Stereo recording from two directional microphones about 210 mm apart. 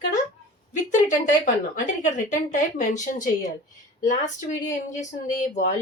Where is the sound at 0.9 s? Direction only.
35° left (ahead or behind).